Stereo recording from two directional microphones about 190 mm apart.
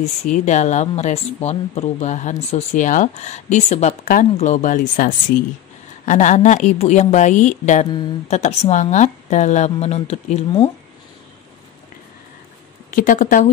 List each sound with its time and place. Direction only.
0.0 s speech: 40° left (ahead or behind)
12.9 s speech: 45° left (ahead or behind)